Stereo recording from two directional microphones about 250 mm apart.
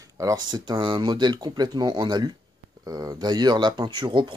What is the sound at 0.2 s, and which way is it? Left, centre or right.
Speech, centre.